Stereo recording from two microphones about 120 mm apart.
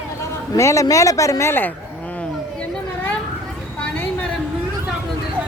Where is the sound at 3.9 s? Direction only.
15° left (ahead or behind).